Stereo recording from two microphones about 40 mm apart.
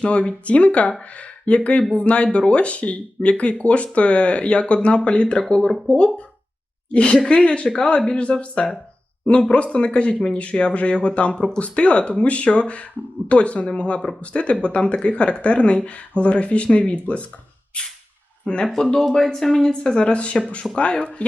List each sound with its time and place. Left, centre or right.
0.0 s speech: left
6.9 s speech: left
17.7 s a sound: left
18.4 s speech: left